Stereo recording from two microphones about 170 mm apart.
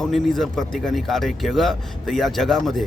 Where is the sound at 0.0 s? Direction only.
Centre (ahead or behind).